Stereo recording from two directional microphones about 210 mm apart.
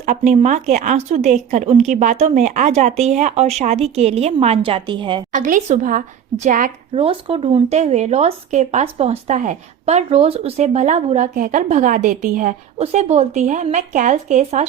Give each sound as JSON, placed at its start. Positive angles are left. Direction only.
{"t": 0.0, "sound": "speech", "side_deg": -35}
{"t": 5.3, "sound": "speech", "side_deg": -40}
{"t": 6.9, "sound": "speech", "side_deg": -25}